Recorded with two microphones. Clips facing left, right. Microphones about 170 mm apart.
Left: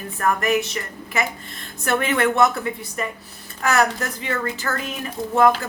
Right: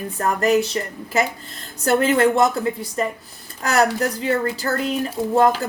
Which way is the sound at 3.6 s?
35° right (ahead or behind).